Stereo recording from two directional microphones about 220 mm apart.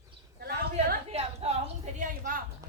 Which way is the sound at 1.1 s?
30° right (ahead or behind).